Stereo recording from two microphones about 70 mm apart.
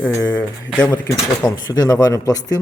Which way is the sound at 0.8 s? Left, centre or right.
Left.